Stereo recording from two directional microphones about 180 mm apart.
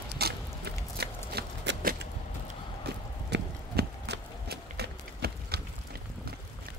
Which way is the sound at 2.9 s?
65° right (ahead or behind).